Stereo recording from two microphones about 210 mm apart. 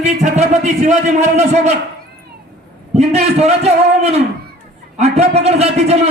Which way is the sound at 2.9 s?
30° right (ahead or behind).